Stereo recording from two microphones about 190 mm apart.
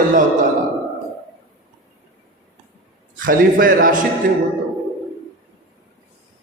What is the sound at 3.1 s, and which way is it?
Mantra, 45° right (ahead or behind).